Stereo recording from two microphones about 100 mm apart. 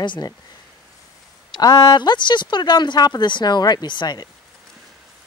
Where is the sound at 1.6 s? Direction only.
45° left (ahead or behind).